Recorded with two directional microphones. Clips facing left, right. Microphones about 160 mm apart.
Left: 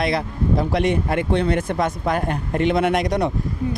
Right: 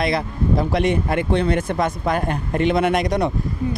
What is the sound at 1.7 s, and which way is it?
Speech, 20° right (ahead or behind).